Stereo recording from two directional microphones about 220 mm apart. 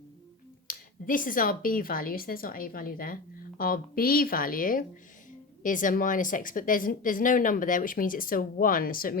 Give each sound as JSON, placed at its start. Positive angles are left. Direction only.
{"t": 0.7, "sound": "speech", "side_deg": 40}